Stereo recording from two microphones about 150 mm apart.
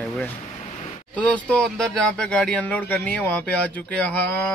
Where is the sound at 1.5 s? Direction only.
5° left (ahead or behind).